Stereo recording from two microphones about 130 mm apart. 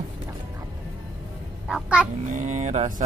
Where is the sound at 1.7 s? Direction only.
5° right (ahead or behind).